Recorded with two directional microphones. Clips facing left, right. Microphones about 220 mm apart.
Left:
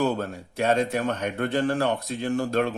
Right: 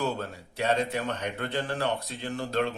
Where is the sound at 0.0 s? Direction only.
50° left (ahead or behind).